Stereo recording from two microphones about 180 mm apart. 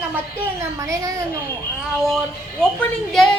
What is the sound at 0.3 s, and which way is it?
Speech, 15° right (ahead or behind).